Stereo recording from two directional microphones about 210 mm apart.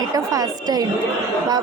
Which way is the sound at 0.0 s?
15° right (ahead or behind).